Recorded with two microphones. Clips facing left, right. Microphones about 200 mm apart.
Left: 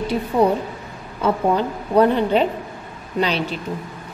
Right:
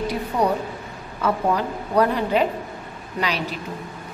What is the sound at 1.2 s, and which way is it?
A woman's voice, 25° left (ahead or behind).